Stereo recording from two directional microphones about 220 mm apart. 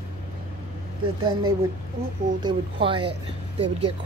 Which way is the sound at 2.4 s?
20° right (ahead or behind).